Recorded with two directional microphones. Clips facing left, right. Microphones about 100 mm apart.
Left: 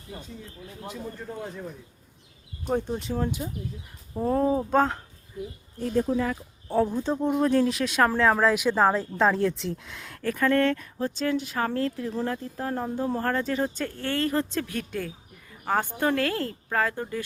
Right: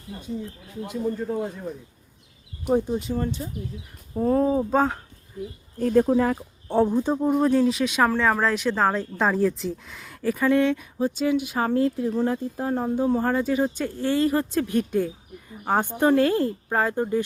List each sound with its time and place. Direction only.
0.9 s speech: 10° right (ahead or behind)
2.9 s speech: centre (ahead or behind)
5.8 s speech: 55° right (ahead or behind)
6.1 s speech: 40° right (ahead or behind)
6.7 s speech: 25° right (ahead or behind)